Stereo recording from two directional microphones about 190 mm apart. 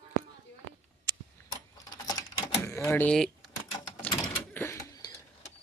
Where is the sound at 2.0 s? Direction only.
15° left (ahead or behind).